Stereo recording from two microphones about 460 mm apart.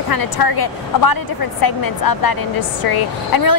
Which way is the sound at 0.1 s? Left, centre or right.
Left.